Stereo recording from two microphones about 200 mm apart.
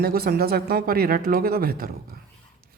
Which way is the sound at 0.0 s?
50° right (ahead or behind).